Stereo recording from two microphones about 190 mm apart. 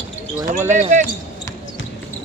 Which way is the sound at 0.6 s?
40° right (ahead or behind).